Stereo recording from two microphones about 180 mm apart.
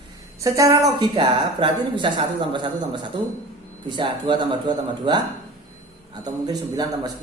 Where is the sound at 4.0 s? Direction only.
25° right (ahead or behind).